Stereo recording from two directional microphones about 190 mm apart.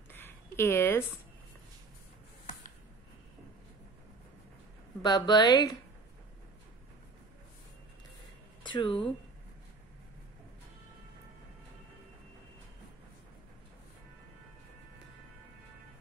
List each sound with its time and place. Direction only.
0.1 s a sound: 10° left (ahead or behind)
5.0 s a woman's voice: 20° left (ahead or behind)
8.6 s speech: 25° left (ahead or behind)